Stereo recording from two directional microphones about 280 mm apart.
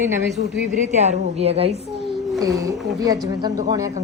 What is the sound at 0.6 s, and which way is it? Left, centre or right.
A woman's voice, right.